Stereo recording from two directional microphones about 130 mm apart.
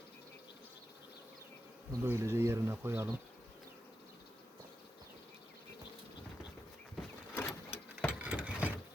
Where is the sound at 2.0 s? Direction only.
20° right (ahead or behind).